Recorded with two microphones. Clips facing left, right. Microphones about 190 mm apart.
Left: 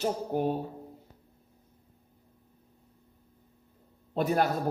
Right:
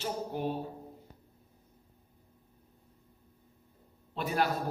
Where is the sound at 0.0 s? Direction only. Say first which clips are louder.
Left 6 dB; 45° left (ahead or behind).